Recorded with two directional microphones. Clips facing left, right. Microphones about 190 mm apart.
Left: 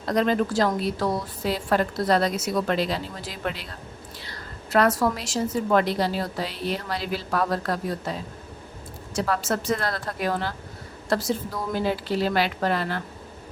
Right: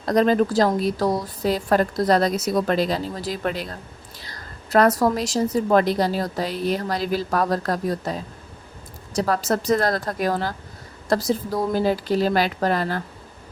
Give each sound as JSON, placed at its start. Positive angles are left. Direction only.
{"t": 0.0, "sound": "a woman's voice", "side_deg": -40}
{"t": 9.1, "sound": "a woman's voice", "side_deg": -40}